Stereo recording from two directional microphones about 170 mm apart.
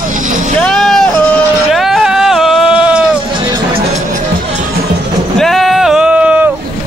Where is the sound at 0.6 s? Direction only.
Centre (ahead or behind).